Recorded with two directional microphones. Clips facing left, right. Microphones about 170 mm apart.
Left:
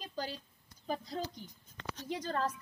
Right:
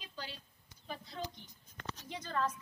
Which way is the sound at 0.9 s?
40° left (ahead or behind).